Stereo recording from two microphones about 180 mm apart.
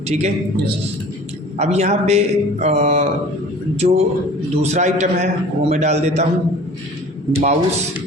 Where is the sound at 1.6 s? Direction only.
40° right (ahead or behind).